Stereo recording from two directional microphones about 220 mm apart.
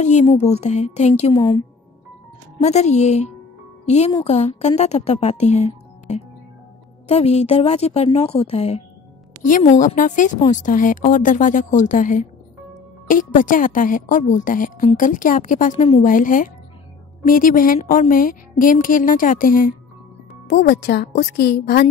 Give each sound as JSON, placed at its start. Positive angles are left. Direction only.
{"t": 0.0, "sound": "a woman's voice", "side_deg": 30}
{"t": 20.4, "sound": "speech", "side_deg": 50}